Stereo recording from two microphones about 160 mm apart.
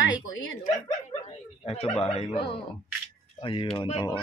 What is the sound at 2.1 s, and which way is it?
Speech, 35° left (ahead or behind).